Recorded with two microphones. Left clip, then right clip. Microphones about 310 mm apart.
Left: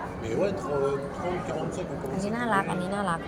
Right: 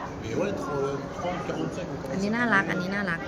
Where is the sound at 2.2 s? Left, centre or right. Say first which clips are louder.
Right 3 dB; centre.